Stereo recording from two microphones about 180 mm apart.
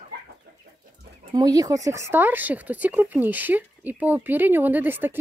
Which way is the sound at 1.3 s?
20° right (ahead or behind).